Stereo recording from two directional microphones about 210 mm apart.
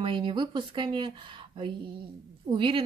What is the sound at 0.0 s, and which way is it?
Speech, 25° right (ahead or behind).